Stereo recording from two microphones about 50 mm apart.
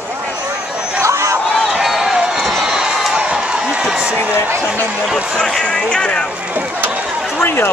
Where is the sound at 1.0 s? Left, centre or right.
Right.